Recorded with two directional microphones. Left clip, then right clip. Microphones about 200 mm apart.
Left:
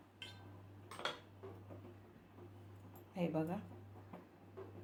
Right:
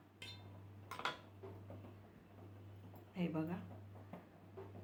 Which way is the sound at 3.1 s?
20° left (ahead or behind).